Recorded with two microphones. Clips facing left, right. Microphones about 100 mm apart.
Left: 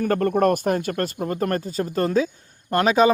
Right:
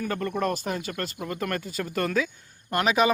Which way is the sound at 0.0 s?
45° left (ahead or behind).